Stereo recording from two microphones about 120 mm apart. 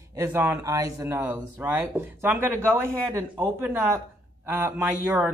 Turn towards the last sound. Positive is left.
turn(degrees=-15)  # may be behind; listen again after turning